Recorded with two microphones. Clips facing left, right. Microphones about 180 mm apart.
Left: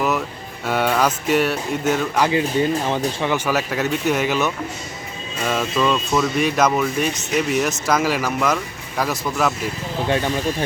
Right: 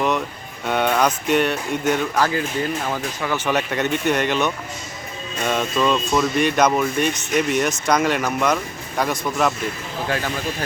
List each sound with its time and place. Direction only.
0.6 s speech: 5° left (ahead or behind)
2.2 s speech: 20° left (ahead or behind)
3.3 s speech: 5° left (ahead or behind)